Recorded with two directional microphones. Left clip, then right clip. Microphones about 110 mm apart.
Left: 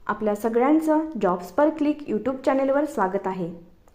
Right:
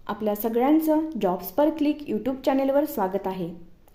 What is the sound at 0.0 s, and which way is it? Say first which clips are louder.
A woman's voice: left 3 dB; 20° right (ahead or behind).